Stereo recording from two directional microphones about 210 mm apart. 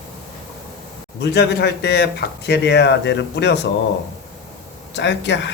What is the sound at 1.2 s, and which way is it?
Speech, 50° left (ahead or behind).